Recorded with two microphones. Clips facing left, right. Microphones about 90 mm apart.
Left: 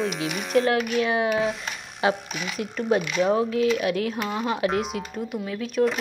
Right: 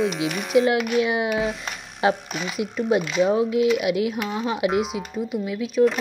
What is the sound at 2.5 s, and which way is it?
Speech, 5° right (ahead or behind).